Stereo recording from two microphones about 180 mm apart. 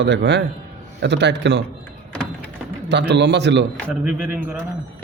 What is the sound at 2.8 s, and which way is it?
Speech, 75° right (ahead or behind).